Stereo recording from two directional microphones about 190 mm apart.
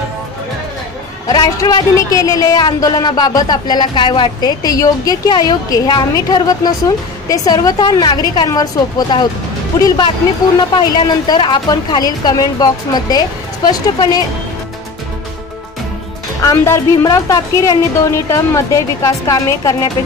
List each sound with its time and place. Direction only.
1.2 s a woman's voice: 20° left (ahead or behind)
16.4 s a woman's voice: 15° left (ahead or behind)